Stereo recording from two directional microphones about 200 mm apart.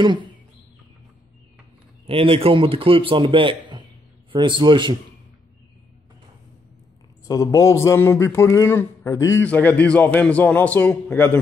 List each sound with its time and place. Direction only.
0.0 s a man's voice: 25° right (ahead or behind)
2.0 s a man's voice: 25° right (ahead or behind)
7.2 s a man's voice: 15° left (ahead or behind)